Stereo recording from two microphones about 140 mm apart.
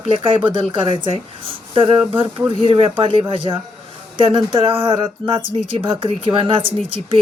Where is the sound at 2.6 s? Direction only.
40° right (ahead or behind).